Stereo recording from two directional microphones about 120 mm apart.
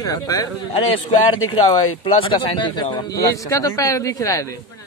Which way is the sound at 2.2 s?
45° left (ahead or behind).